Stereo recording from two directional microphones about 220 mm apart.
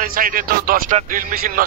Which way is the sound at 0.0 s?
40° right (ahead or behind).